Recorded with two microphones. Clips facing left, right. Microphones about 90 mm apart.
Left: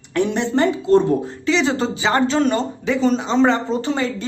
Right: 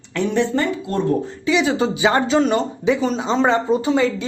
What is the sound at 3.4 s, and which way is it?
Speech, 15° right (ahead or behind).